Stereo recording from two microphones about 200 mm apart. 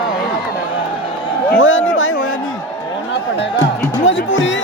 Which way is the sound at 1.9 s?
85° left.